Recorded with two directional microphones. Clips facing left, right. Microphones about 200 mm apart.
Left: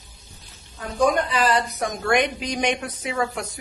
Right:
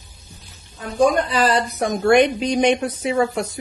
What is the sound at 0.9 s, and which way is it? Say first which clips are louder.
Speech: right 3 dB; 35° right (ahead or behind).